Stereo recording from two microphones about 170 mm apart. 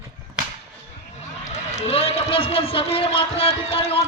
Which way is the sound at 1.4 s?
40° left (ahead or behind).